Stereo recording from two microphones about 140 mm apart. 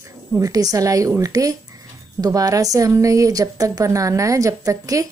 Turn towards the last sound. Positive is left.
turn(degrees=-25)  # may be behind; listen again after turning